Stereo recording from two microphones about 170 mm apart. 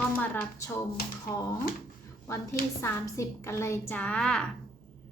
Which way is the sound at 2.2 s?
15° left (ahead or behind).